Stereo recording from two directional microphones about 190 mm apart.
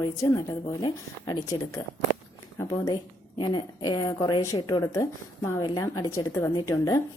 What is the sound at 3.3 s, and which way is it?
A woman's voice, 25° left (ahead or behind).